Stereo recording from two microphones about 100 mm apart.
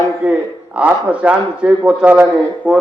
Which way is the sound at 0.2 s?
15° right (ahead or behind).